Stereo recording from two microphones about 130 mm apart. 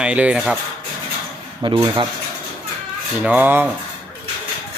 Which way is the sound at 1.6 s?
35° right (ahead or behind).